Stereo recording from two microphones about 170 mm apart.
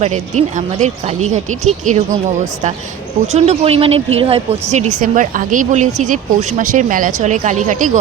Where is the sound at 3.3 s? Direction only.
40° right (ahead or behind).